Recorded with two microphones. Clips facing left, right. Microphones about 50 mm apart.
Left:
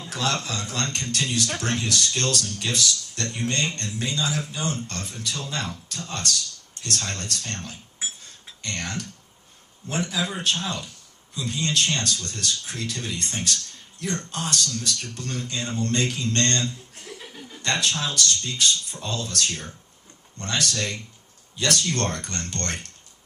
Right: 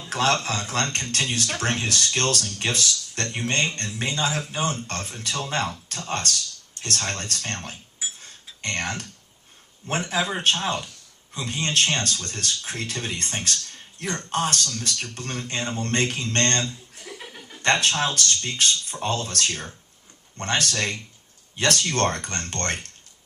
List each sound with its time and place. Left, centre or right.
0.1 s speech: right
8.2 s a sound: right
9.8 s speech: right
17.1 s chuckle: right
17.6 s speech: right